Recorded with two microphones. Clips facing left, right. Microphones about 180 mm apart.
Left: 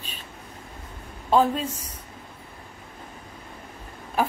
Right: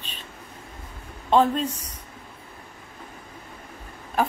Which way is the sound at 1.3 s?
5° left (ahead or behind).